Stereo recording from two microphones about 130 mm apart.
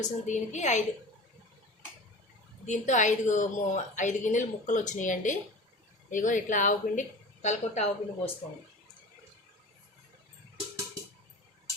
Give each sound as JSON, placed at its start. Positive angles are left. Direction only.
{"t": 0.0, "sound": "speech", "side_deg": 65}
{"t": 2.6, "sound": "speech", "side_deg": 65}
{"t": 7.4, "sound": "a woman's voice", "side_deg": 60}